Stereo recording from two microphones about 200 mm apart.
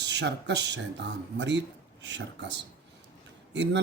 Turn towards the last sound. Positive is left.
turn(degrees=-65)  # may be behind; listen again after turning